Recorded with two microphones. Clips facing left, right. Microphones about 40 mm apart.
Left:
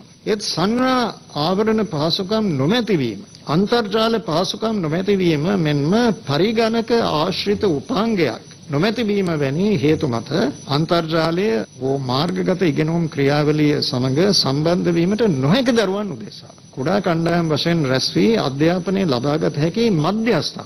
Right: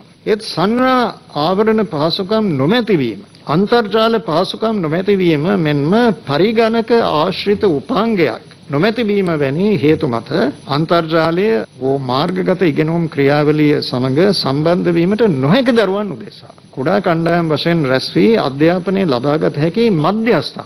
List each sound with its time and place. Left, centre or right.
0.2 s a man's voice: centre
1.7 s a man's voice: centre
2.0 s a man's voice: right
2.4 s a man's voice: centre
2.7 s a man's voice: centre
4.7 s a man's voice: centre
5.0 s a man's voice: right